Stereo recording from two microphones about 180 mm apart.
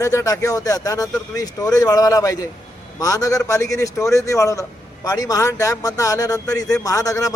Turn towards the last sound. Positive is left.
turn(degrees=20)  # may be behind; listen again after turning